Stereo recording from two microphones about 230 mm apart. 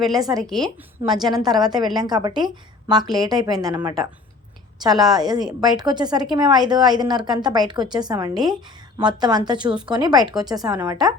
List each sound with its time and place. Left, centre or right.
0.2 s speech: centre
0.4 s a woman's voice: centre
1.3 s a woman's voice: centre